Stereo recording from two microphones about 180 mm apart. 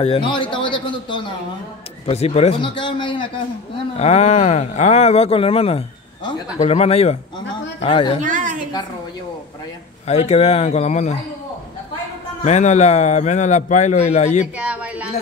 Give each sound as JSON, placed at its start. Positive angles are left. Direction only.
{"t": 0.0, "sound": "a man's voice", "side_deg": 30}
{"t": 4.0, "sound": "speech", "side_deg": 40}
{"t": 8.2, "sound": "a woman's voice", "side_deg": -45}
{"t": 10.0, "sound": "speech", "side_deg": 35}
{"t": 12.4, "sound": "speech", "side_deg": 40}
{"t": 14.6, "sound": "a sound", "side_deg": -5}